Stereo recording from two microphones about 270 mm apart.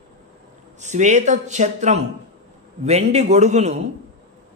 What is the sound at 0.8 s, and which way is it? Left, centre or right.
A man's voice, right.